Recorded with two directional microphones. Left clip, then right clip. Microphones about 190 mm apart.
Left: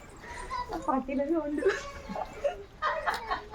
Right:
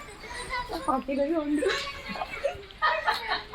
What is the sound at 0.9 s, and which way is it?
Speech, 30° right (ahead or behind).